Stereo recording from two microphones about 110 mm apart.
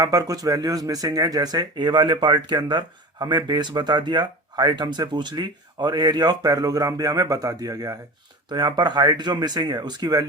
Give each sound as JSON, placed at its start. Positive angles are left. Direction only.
{"t": 0.0, "sound": "speech", "side_deg": -35}